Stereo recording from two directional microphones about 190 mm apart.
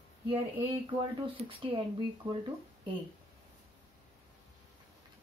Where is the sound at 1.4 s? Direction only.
30° right (ahead or behind).